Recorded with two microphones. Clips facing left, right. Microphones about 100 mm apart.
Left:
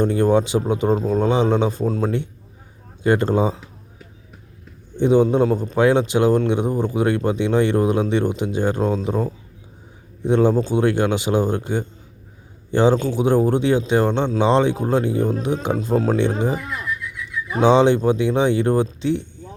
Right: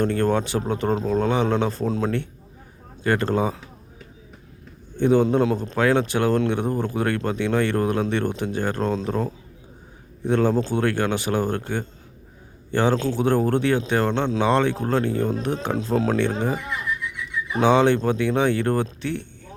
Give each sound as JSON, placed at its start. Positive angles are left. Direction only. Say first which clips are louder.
{"t": 0.0, "sound": "speech", "louder": "left 4 dB", "side_deg": 15}
{"t": 4.9, "sound": "speech", "louder": "left 3 dB", "side_deg": 15}